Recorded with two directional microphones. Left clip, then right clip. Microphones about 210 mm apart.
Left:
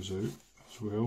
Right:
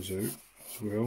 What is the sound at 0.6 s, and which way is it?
Speech, 15° right (ahead or behind).